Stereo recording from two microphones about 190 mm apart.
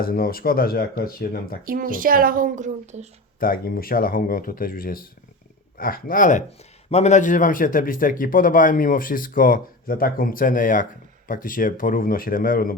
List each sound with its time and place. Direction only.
0.0 s a man's voice: 50° left (ahead or behind)
1.6 s speech: 45° right (ahead or behind)
3.4 s a man's voice: 50° left (ahead or behind)